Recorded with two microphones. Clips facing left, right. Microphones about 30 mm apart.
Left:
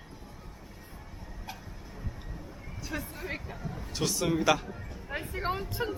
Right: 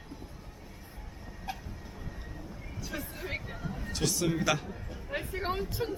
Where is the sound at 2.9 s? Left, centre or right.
Centre.